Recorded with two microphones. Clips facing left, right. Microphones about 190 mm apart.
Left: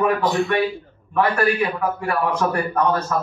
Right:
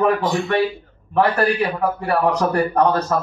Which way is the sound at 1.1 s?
35° right (ahead or behind).